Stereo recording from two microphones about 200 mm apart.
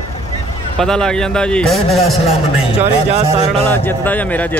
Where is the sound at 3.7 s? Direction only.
10° left (ahead or behind).